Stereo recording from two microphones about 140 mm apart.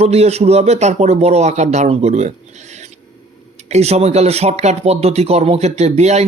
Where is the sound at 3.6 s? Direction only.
50° right (ahead or behind).